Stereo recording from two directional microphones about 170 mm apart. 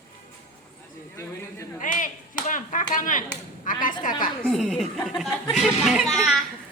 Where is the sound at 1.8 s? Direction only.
50° left (ahead or behind).